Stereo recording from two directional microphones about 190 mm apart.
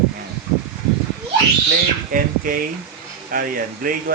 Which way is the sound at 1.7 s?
45° right (ahead or behind).